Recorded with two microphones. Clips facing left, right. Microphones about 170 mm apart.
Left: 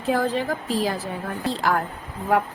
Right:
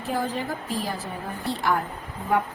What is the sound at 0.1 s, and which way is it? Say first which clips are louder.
A woman's voice: left 5 dB; 90° left.